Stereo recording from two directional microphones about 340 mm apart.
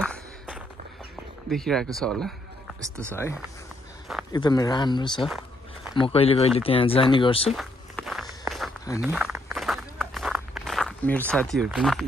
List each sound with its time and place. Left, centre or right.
0.0 s walk: centre
1.5 s speech: centre
3.1 s speech: centre
7.5 s walk: centre